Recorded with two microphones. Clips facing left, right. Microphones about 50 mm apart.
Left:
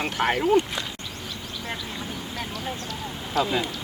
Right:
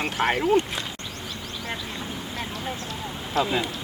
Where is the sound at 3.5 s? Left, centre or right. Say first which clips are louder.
Even; centre.